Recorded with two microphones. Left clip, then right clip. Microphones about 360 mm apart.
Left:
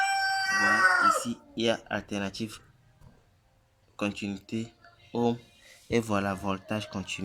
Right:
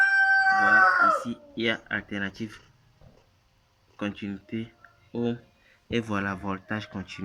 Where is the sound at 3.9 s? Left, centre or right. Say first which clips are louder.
Left 1 dB; centre.